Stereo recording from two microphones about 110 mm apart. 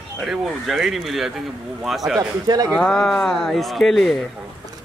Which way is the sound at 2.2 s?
35° right (ahead or behind).